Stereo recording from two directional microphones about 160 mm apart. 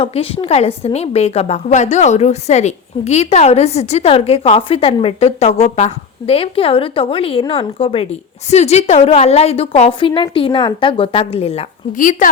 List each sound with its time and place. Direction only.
0.0 s a woman's voice: 35° left (ahead or behind)
11.9 s speech: 55° left (ahead or behind)